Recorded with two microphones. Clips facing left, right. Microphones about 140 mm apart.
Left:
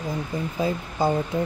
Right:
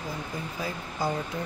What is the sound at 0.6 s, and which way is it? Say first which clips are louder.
Speech: left 7 dB; 25° left (ahead or behind).